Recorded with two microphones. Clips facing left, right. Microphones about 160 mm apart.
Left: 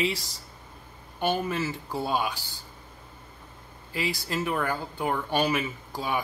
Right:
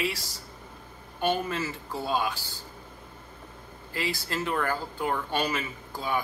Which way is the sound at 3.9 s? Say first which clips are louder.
Left 1 dB; 15° left (ahead or behind).